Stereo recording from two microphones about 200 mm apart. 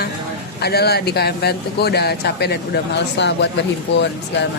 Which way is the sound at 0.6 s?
55° left (ahead or behind).